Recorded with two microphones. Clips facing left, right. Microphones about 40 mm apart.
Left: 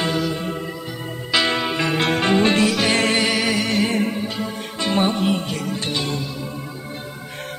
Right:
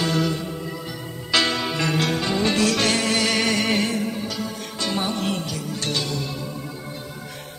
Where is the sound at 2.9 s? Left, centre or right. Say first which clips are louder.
Left 4 dB; left.